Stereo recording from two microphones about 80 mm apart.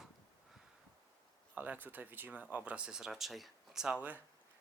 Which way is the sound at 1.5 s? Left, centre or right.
Right.